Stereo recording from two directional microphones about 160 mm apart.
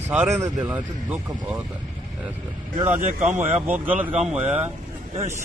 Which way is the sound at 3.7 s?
10° right (ahead or behind).